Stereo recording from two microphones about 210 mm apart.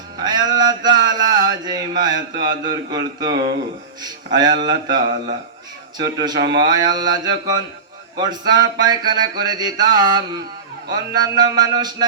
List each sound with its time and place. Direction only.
0.2 s music: 20° right (ahead or behind)